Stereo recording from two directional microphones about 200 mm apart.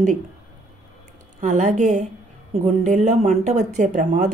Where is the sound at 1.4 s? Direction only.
35° right (ahead or behind).